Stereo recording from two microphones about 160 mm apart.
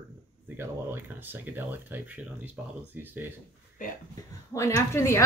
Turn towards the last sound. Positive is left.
turn(degrees=15)  # may be behind; listen again after turning